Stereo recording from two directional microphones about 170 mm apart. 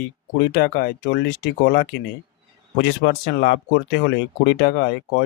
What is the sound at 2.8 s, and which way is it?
Speech, 90° left.